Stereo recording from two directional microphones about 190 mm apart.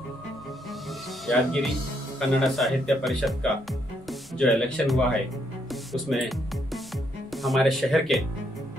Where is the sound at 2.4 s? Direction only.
Centre (ahead or behind).